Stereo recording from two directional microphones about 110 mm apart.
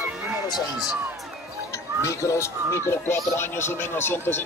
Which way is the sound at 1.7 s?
30° left (ahead or behind).